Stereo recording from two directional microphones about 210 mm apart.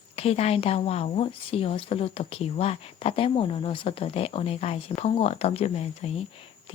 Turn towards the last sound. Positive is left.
turn(degrees=30)  # may be behind; listen again after turning